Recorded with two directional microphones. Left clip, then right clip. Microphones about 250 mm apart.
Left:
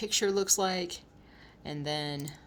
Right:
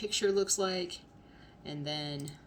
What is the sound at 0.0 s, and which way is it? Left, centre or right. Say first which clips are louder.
Speech: left 1 dB; left.